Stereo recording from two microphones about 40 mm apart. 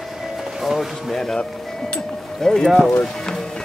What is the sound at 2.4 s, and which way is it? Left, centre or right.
Speech, centre.